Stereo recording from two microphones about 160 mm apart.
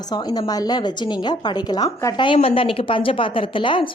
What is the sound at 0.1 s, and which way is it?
A woman's voice, 25° left (ahead or behind).